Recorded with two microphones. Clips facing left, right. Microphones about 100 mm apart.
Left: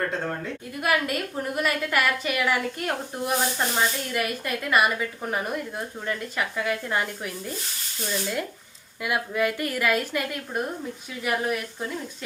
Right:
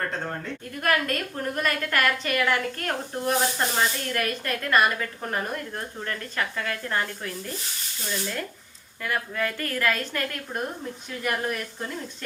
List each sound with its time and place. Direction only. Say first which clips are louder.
0.1 s a woman's voice: left 2 dB; centre (ahead or behind)
9.0 s a woman's voice: left 3 dB; 15° left (ahead or behind)